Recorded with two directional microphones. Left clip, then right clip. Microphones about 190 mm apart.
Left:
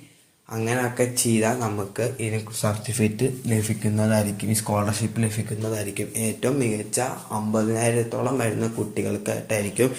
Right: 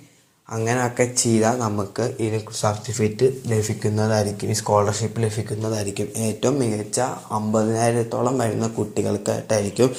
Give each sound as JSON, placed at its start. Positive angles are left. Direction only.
{"t": 0.5, "sound": "a man's voice", "side_deg": -30}